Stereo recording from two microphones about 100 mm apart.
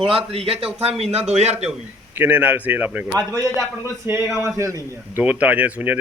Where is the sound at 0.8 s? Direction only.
90° right.